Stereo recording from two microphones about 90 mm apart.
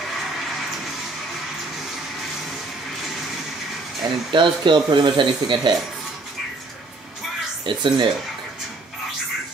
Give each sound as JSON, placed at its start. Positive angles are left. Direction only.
{"t": 4.3, "sound": "speech", "side_deg": -65}
{"t": 7.6, "sound": "speech", "side_deg": -55}